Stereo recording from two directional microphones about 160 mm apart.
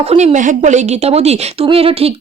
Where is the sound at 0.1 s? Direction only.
40° right (ahead or behind).